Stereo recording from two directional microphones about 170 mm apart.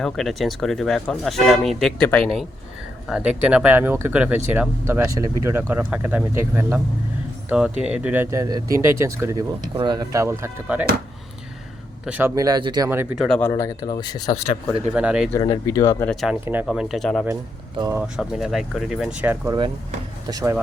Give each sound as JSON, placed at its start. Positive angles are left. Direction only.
{"t": 0.0, "sound": "speech", "side_deg": 0}
{"t": 12.0, "sound": "speech", "side_deg": -10}
{"t": 12.3, "sound": "speech", "side_deg": -20}
{"t": 12.9, "sound": "speech", "side_deg": -15}
{"t": 13.1, "sound": "speech", "side_deg": 0}
{"t": 13.4, "sound": "speech", "side_deg": 20}
{"t": 14.9, "sound": "speech", "side_deg": -5}
{"t": 15.3, "sound": "speech", "side_deg": 20}
{"t": 16.0, "sound": "speech", "side_deg": -5}